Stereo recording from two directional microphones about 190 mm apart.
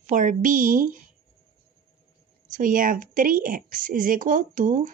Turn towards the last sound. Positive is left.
turn(degrees=-45)  # may be behind; listen again after turning